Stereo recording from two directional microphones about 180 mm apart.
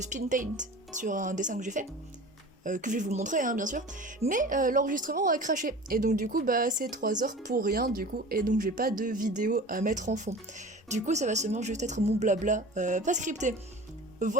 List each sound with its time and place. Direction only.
0.0 s speech: 45° right (ahead or behind)